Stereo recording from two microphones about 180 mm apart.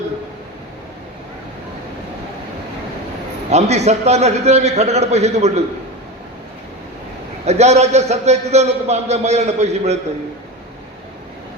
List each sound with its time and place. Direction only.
3.5 s a man's voice: 35° right (ahead or behind)
7.4 s a man's voice: 35° right (ahead or behind)